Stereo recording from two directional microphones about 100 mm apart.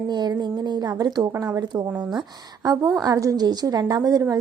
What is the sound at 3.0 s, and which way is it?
A woman's voice, 35° right (ahead or behind).